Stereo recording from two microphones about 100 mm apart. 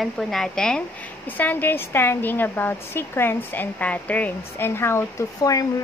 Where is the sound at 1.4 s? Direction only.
20° left (ahead or behind).